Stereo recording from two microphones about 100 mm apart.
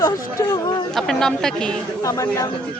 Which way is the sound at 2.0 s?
35° left (ahead or behind).